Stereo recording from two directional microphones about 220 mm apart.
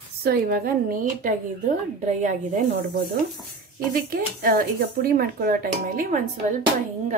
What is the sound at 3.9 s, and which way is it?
A woman's voice, 40° right (ahead or behind).